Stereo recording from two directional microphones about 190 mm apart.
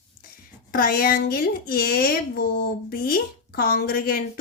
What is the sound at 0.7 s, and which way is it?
A woman's voice, 50° left (ahead or behind).